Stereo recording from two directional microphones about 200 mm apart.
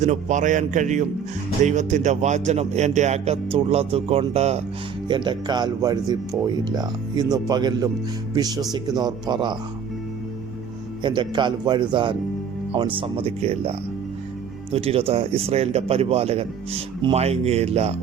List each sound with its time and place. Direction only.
0.0 s speech: 35° right (ahead or behind); by 9.6 s 20° right (ahead or behind)
11.0 s speech: 25° right (ahead or behind)